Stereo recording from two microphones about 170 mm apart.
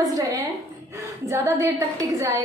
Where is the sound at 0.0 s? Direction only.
20° right (ahead or behind).